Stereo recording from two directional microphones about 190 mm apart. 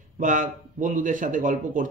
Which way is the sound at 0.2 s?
45° right (ahead or behind).